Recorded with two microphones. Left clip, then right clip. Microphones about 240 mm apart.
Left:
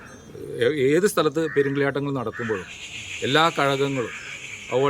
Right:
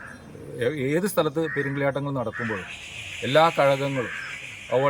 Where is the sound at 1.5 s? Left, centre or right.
Centre.